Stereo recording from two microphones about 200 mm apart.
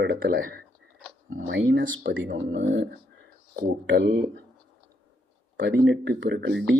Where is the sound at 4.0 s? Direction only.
55° right (ahead or behind).